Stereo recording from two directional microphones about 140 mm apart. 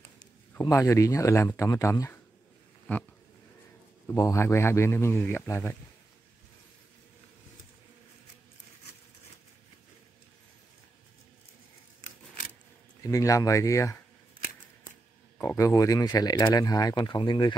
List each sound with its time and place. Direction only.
0.6 s a man's voice: 20° left (ahead or behind)
4.1 s a man's voice: 20° left (ahead or behind)
13.0 s a man's voice: 25° left (ahead or behind)
15.3 s a man's voice: 20° left (ahead or behind)